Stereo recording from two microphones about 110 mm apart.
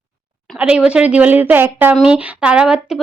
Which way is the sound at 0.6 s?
10° right (ahead or behind).